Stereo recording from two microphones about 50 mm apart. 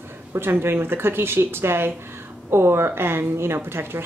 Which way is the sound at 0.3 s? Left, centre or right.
Right.